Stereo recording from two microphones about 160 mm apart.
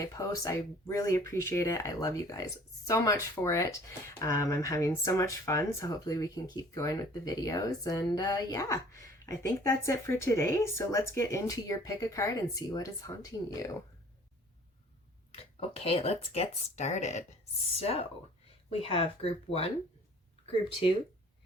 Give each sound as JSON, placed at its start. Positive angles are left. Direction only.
{"t": 0.0, "sound": "speech", "side_deg": 20}
{"t": 15.4, "sound": "speech", "side_deg": 40}